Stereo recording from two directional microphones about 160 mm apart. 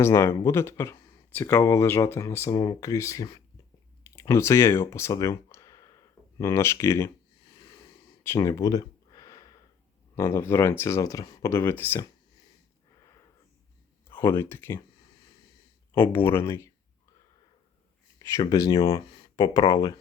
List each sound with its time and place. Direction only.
0.0 s speech: 15° left (ahead or behind)
4.0 s a sound: 20° left (ahead or behind)
6.4 s speech: 15° left (ahead or behind)
7.5 s a sound: 20° left (ahead or behind)
10.2 s speech: 15° left (ahead or behind)
14.1 s speech: 15° left (ahead or behind)
15.9 s speech: 15° left (ahead or behind)
18.2 s speech: 20° left (ahead or behind)
18.9 s speech: 35° left (ahead or behind)